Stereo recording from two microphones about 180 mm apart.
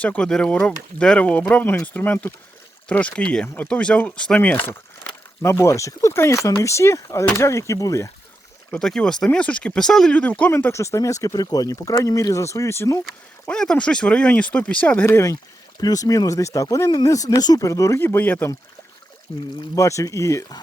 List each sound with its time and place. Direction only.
0.0 s speech: 5° left (ahead or behind)
8.7 s speech: 5° left (ahead or behind)
13.4 s speech: 5° left (ahead or behind)
19.3 s speech: 35° left (ahead or behind)
19.7 s speech: 15° left (ahead or behind)